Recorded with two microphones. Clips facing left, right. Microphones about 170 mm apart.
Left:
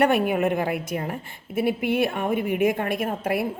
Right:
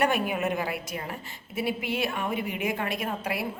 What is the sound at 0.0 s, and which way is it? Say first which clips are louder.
A woman's voice: left 6 dB; 55° left (ahead or behind).